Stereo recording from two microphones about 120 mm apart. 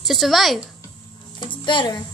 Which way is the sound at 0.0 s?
Centre (ahead or behind).